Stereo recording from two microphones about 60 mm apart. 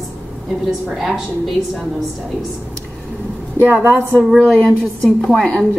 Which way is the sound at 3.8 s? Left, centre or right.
Right.